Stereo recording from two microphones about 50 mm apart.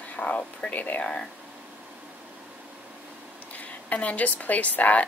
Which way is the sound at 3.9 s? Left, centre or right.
Left.